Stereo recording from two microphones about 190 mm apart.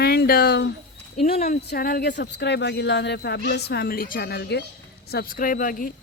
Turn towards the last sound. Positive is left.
turn(degrees=45)  # may be behind; listen again after turning